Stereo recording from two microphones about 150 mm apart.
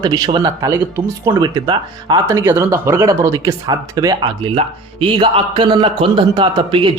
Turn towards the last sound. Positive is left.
turn(degrees=-35)  # may be behind; listen again after turning